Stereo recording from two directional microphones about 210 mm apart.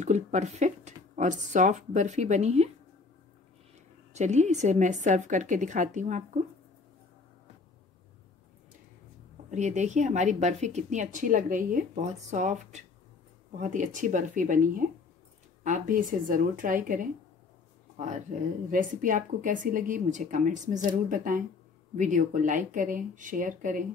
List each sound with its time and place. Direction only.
0.0 s a woman's voice: 35° right (ahead or behind)
4.1 s a woman's voice: 35° right (ahead or behind)
9.5 s a woman's voice: 35° right (ahead or behind)